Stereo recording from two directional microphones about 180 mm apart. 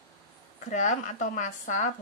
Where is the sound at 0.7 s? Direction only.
40° left (ahead or behind).